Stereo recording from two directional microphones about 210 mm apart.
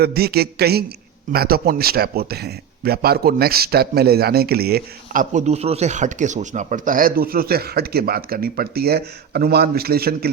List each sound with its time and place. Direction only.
0.0 s speech: 50° right (ahead or behind)